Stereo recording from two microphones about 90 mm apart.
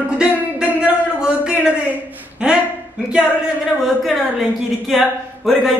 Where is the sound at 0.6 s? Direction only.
10° right (ahead or behind).